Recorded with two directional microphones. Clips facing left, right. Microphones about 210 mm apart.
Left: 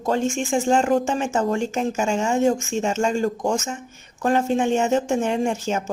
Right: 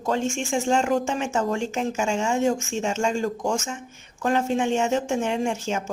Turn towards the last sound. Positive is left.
turn(degrees=40)  # may be behind; listen again after turning